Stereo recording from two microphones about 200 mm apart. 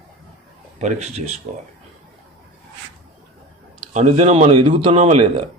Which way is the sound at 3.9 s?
35° right (ahead or behind).